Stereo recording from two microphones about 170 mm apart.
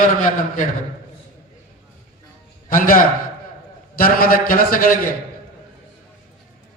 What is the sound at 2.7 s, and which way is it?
A man's voice, 55° left (ahead or behind).